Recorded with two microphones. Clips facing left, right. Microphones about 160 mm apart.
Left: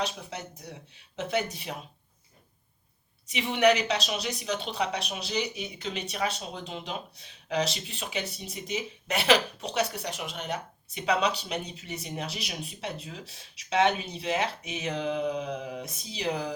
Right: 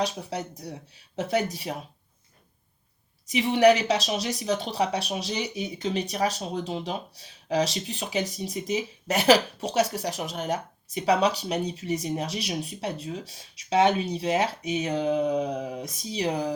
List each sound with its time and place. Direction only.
0.0 s speech: 35° right (ahead or behind)
3.2 s speech: 40° right (ahead or behind)